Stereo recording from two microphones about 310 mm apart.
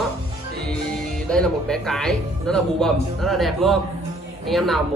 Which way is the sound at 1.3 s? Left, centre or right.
Centre.